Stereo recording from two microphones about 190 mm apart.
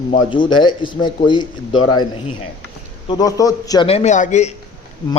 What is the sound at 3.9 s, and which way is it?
Speech, 35° left (ahead or behind).